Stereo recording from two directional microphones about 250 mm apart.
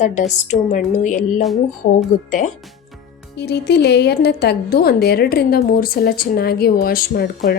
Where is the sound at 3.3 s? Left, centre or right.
Left.